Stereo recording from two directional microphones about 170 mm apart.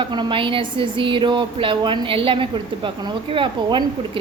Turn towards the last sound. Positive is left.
turn(degrees=-30)  # may be behind; listen again after turning